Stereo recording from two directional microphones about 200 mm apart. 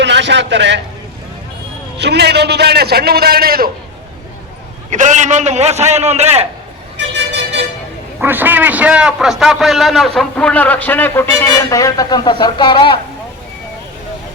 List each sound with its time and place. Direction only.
0.0 s a man's voice: 60° right (ahead or behind)
2.0 s a man's voice: 55° right (ahead or behind)
4.9 s a man's voice: 40° right (ahead or behind)
6.9 s vehicle: 60° right (ahead or behind)
8.2 s a man's voice: 10° right (ahead or behind); by 13.0 s 25° left (ahead or behind)